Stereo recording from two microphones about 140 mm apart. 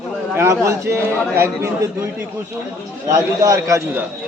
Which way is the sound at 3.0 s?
25° right (ahead or behind).